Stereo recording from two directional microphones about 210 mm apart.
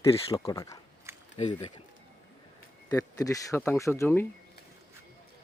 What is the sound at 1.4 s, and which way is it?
Speech, 30° left (ahead or behind).